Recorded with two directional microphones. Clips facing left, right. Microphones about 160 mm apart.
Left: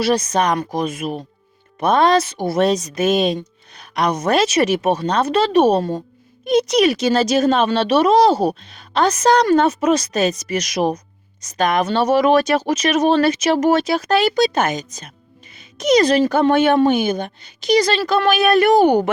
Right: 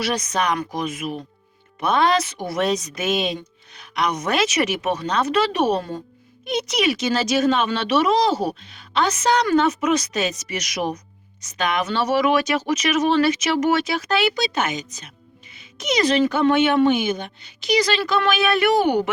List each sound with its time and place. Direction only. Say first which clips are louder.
0.0 s speech: left 6 dB; 30° left (ahead or behind)